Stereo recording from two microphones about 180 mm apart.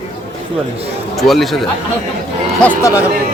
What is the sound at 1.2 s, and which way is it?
Speech, centre (ahead or behind).